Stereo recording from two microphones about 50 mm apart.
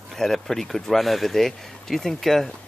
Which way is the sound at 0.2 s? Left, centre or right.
Centre.